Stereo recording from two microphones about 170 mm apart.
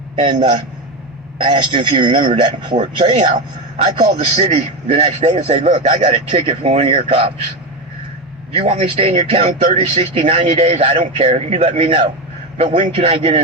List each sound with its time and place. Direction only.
0.3 s a man's voice: 30° right (ahead or behind)
8.5 s speech: 35° right (ahead or behind)